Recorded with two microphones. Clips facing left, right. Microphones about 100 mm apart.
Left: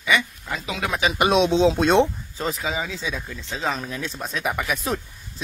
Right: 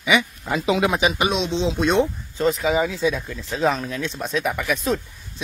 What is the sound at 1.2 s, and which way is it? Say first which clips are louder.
Speech: left 4 dB; 50° left (ahead or behind).